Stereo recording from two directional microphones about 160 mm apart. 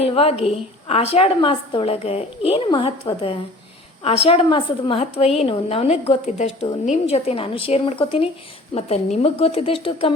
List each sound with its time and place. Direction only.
0.0 s a woman's voice: 35° left (ahead or behind)